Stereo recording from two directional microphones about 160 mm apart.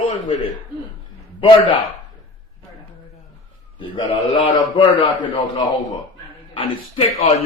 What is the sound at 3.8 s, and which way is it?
A man's voice, 30° left (ahead or behind).